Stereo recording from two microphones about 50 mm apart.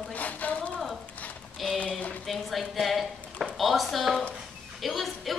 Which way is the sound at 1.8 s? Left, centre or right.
Left.